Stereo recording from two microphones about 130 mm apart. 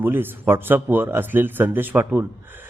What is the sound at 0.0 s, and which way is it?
A man's voice, 15° right (ahead or behind).